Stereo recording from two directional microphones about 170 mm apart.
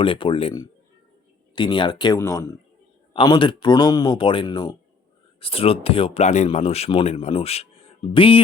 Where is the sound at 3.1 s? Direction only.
30° left (ahead or behind).